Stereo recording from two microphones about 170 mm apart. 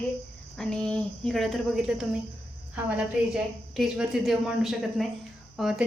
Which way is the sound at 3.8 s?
Centre (ahead or behind).